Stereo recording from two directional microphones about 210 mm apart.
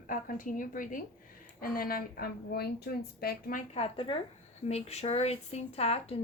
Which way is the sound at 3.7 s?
25° left (ahead or behind).